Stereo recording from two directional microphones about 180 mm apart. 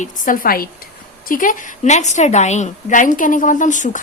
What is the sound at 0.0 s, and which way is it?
A woman's voice, 50° left (ahead or behind).